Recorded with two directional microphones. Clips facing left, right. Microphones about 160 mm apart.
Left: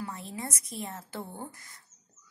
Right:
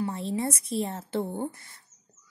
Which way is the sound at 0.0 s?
30° right (ahead or behind).